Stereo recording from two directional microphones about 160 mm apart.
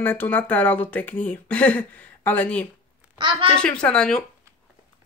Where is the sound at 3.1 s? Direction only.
30° right (ahead or behind).